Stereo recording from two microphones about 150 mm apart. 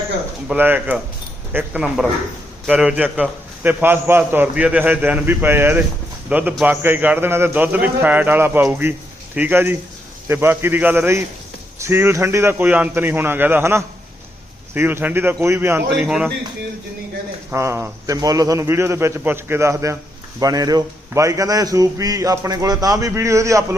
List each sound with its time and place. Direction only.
0.4 s a man's voice: 10° right (ahead or behind)
17.5 s a man's voice: 20° right (ahead or behind)